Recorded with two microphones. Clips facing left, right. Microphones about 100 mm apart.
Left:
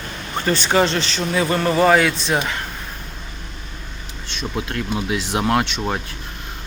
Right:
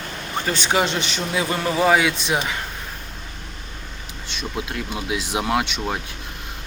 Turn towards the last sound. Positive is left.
turn(degrees=-5)  # may be behind; listen again after turning